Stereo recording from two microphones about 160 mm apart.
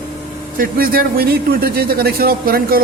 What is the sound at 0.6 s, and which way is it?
A man's voice, 65° right (ahead or behind).